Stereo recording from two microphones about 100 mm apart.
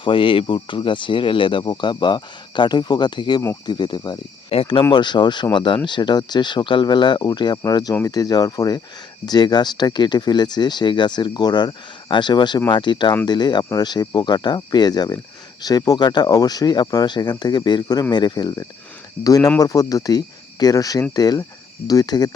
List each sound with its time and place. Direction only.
0.0 s speech: 60° left (ahead or behind)
4.4 s speech: 65° left (ahead or behind)
4.9 s speech: 50° left (ahead or behind)